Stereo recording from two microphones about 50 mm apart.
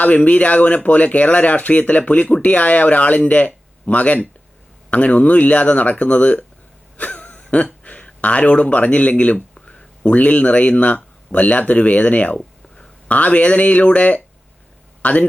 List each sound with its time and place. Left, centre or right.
0.0 s speech: left
12.4 s a sound: centre
13.1 s speech: left